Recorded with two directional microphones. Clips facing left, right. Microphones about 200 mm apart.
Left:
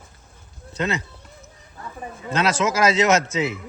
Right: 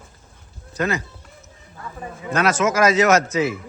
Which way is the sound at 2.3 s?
25° left (ahead or behind).